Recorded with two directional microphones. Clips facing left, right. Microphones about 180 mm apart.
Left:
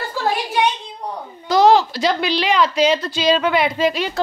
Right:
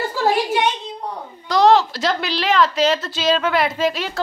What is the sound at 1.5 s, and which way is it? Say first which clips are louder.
A woman's voice: left 1 dB; centre (ahead or behind).